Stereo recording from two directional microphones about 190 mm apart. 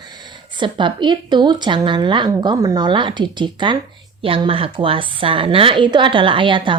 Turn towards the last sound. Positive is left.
turn(degrees=-25)  # may be behind; listen again after turning